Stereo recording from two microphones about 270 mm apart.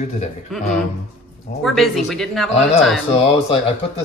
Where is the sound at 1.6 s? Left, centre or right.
Centre.